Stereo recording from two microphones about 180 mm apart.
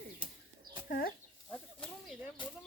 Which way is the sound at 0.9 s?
55° left (ahead or behind).